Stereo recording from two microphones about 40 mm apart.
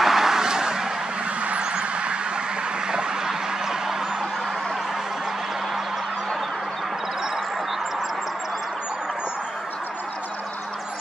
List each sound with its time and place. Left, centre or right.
0.0 s vehicle: centre
1.4 s vehicle: right
2.9 s a sound: centre